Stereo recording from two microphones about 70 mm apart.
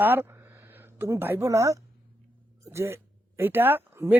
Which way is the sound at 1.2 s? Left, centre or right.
Right.